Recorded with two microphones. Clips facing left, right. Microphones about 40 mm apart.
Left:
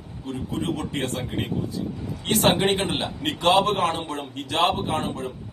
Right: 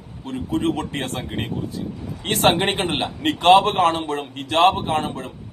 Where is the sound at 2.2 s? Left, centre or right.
Right.